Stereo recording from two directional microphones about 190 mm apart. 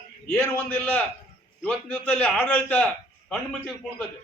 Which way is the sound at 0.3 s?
5° left (ahead or behind).